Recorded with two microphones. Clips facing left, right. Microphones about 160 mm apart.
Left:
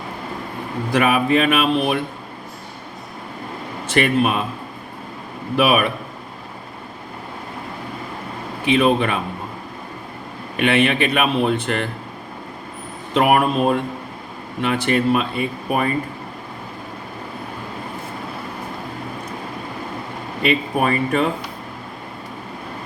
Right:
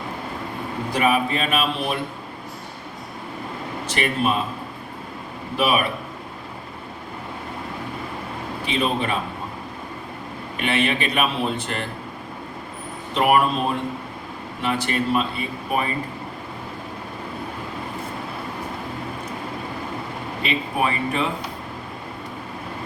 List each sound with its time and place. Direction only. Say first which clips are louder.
0.9 s speech: left 4 dB; 60° left (ahead or behind)
3.9 s speech: left 5 dB; 65° left (ahead or behind)
5.5 s speech: left 4 dB; 60° left (ahead or behind)
8.6 s speech: left 7 dB; 60° left (ahead or behind)
10.6 s speech: left 5 dB; 60° left (ahead or behind)
13.1 s speech: left 3 dB; 55° left (ahead or behind)
20.4 s speech: left 5 dB; 50° left (ahead or behind)